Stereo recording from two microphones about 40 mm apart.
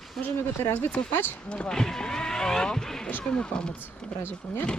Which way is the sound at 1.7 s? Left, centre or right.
Centre.